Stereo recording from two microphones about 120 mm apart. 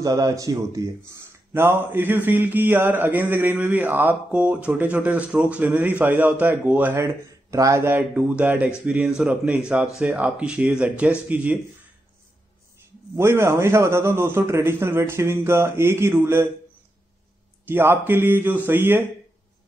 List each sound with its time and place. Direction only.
0.0 s a man's voice: 30° right (ahead or behind)
1.5 s mantra: 20° right (ahead or behind)
7.5 s mantra: 25° right (ahead or behind)
13.1 s a man's voice: 20° right (ahead or behind)
17.6 s mantra: 20° right (ahead or behind)